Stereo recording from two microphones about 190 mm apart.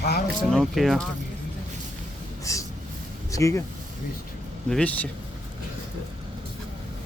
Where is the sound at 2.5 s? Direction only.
15° left (ahead or behind).